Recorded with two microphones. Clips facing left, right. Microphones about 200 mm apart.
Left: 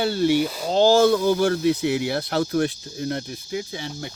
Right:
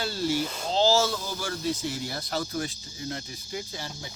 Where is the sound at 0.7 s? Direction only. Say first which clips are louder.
Left 8 dB; 55° left (ahead or behind).